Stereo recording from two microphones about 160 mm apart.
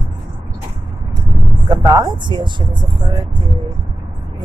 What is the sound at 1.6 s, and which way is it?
Speech, 25° right (ahead or behind).